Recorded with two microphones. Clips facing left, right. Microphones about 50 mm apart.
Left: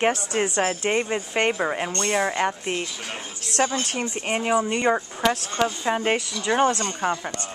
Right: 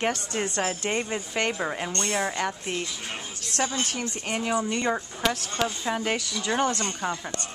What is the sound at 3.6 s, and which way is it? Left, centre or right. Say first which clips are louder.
Speech: left 4 dB; left.